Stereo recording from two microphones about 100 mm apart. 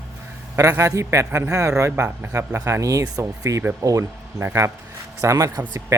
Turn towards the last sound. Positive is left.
turn(degrees=-30)  # may be behind; listen again after turning